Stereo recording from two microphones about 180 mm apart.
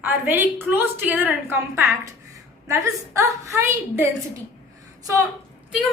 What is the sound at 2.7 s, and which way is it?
A woman's voice, 15° right (ahead or behind).